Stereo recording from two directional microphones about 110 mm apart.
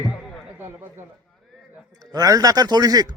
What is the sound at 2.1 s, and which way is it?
Speech, 35° right (ahead or behind).